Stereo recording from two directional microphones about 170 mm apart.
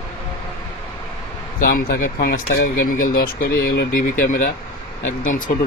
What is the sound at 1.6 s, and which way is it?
Speech, 55° left (ahead or behind).